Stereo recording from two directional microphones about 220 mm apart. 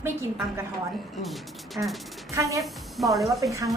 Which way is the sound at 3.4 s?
15° right (ahead or behind).